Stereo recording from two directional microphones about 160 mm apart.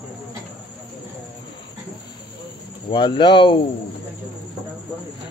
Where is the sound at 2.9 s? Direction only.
30° left (ahead or behind).